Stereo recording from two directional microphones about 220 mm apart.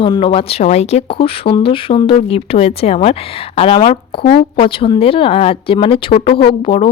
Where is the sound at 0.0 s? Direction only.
25° left (ahead or behind).